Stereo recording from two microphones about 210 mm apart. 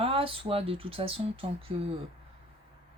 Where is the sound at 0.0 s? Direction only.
25° right (ahead or behind).